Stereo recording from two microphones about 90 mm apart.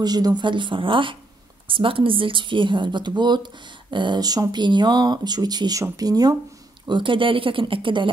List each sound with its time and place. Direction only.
0.0 s a woman's voice: 50° right (ahead or behind)
6.9 s speech: 65° right (ahead or behind)